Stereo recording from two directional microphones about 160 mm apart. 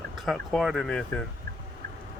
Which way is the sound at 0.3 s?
Centre (ahead or behind).